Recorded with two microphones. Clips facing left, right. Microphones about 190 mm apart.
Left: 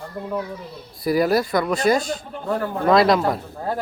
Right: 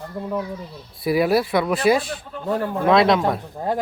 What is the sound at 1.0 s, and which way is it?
Speech, centre (ahead or behind).